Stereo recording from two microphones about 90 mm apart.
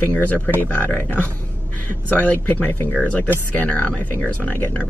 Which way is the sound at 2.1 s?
20° left (ahead or behind).